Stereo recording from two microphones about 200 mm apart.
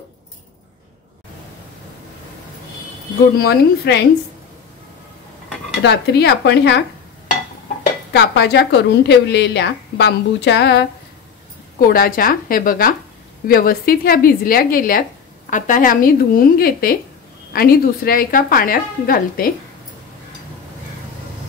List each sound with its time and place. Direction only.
3.3 s a woman's voice: 55° left (ahead or behind)
5.8 s a woman's voice: 55° left (ahead or behind)
8.1 s a woman's voice: 55° left (ahead or behind)
11.8 s a woman's voice: 45° left (ahead or behind)